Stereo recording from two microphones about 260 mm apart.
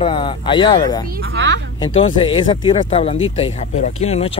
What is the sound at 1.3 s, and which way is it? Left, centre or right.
Speech, right.